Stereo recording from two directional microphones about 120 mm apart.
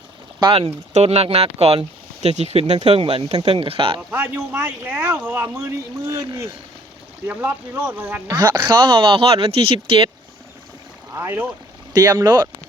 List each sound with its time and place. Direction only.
0.9 s speech: 55° right (ahead or behind)
4.1 s speech: 20° right (ahead or behind)
7.3 s speech: 15° right (ahead or behind)
8.3 s speech: 35° right (ahead or behind)
11.1 s speech: 20° right (ahead or behind)
11.9 s speech: 30° right (ahead or behind)